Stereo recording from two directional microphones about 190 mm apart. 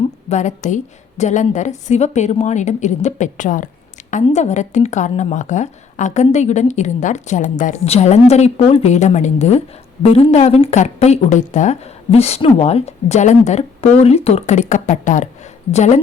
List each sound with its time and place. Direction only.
0.3 s a woman's voice: 40° left (ahead or behind)